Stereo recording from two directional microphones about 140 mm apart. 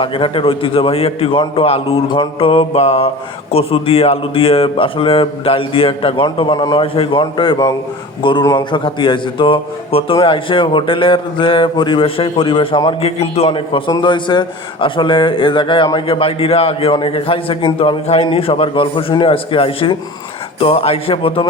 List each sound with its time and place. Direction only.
0.0 s speech: 40° left (ahead or behind)
13.0 s a man's voice: 50° left (ahead or behind)